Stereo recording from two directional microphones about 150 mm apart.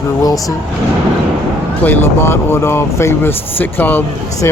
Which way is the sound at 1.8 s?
10° left (ahead or behind).